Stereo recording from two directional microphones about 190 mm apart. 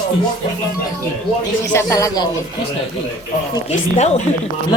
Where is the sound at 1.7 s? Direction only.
15° left (ahead or behind).